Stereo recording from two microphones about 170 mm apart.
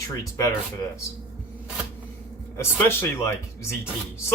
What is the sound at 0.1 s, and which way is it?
Speech, 20° left (ahead or behind).